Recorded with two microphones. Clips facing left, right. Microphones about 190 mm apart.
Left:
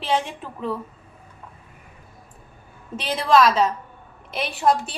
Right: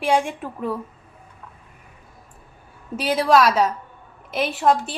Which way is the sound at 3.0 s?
10° right (ahead or behind).